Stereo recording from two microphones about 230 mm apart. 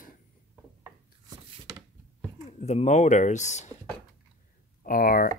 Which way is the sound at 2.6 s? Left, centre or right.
Left.